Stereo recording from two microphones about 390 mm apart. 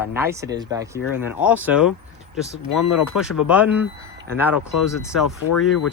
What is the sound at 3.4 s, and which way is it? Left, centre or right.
Speech, centre.